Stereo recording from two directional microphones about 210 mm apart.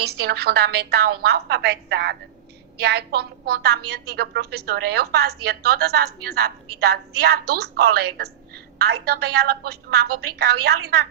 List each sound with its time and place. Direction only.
0.0 s a woman's voice: 50° right (ahead or behind)